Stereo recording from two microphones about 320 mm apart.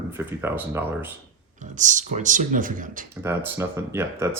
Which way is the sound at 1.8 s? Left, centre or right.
Right.